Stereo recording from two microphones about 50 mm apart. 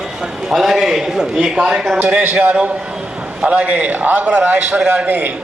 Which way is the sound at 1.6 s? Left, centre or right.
Centre.